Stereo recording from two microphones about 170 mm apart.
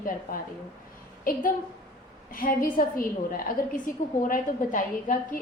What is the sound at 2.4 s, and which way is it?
Speech, 55° left (ahead or behind).